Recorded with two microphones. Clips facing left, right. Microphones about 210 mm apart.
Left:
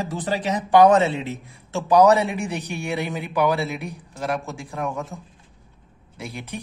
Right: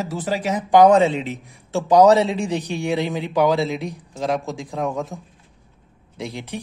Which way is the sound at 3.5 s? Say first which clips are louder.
Right 4 dB; 15° right (ahead or behind).